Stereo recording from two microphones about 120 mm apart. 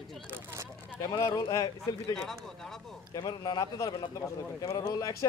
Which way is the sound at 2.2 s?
5° left (ahead or behind).